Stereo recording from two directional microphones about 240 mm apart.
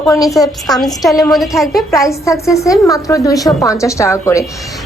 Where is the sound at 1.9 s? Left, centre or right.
Centre.